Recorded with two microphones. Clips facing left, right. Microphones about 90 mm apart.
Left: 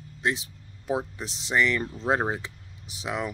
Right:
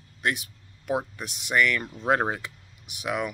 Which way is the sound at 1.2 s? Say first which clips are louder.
Right 2 dB; 30° left (ahead or behind).